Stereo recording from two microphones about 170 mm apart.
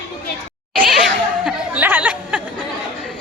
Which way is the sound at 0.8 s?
5° right (ahead or behind).